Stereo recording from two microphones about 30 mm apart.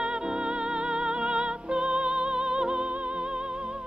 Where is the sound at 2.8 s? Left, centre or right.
Right.